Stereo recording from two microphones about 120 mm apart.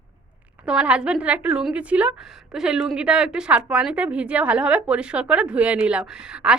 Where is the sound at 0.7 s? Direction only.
10° right (ahead or behind).